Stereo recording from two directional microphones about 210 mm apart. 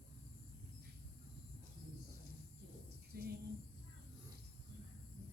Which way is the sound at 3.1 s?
45° right (ahead or behind).